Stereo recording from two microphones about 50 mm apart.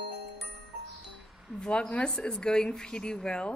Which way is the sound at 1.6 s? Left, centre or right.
Centre.